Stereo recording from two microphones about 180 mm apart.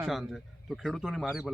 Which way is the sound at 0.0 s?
Centre (ahead or behind).